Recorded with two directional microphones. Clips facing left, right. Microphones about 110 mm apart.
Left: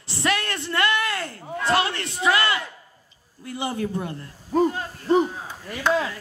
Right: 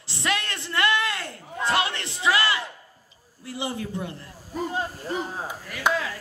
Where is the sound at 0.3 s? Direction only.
20° right (ahead or behind).